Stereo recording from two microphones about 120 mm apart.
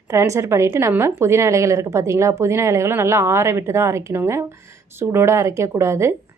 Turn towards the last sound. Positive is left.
turn(degrees=-25)  # may be behind; listen again after turning